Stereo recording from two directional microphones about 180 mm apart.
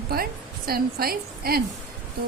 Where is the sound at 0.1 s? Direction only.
55° right (ahead or behind).